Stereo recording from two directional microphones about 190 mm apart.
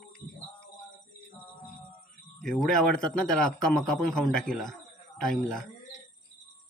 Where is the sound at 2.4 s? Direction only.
5° left (ahead or behind).